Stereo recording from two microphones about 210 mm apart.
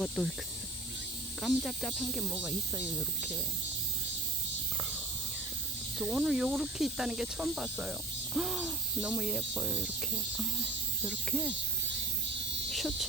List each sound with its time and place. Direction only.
1.4 s cricket: centre (ahead or behind)
6.0 s cricket: 5° right (ahead or behind)
11.0 s cricket: 5° left (ahead or behind)
12.7 s speech: centre (ahead or behind)